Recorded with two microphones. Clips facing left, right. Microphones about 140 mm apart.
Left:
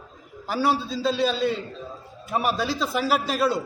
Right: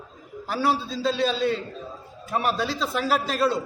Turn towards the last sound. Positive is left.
turn(degrees=5)  # may be behind; listen again after turning